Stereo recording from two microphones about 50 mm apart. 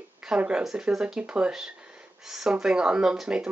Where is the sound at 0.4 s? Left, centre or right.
Right.